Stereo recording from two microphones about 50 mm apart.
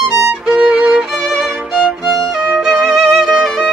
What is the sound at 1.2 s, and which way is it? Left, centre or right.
Violin, centre.